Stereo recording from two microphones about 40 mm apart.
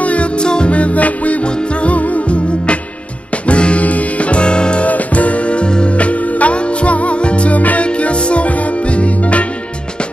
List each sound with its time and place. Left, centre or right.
0.0 s music: left
0.4 s music: left
1.5 s music: left
4.8 s music: left